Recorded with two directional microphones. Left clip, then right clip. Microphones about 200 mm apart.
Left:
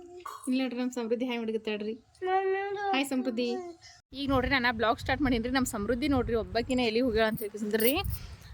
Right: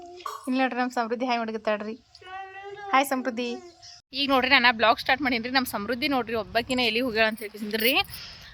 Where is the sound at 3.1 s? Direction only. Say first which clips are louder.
Right 2 dB; centre (ahead or behind).